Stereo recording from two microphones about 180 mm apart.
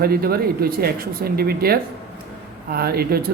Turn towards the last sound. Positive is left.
turn(degrees=-60)  # may be behind; listen again after turning